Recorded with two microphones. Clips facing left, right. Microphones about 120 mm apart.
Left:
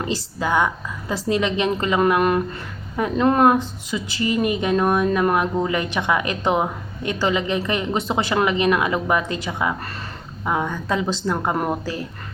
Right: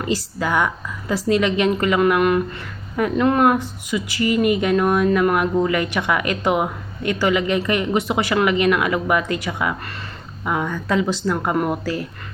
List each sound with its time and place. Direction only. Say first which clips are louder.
0.0 s a woman's voice: right 2 dB; 25° left (ahead or behind)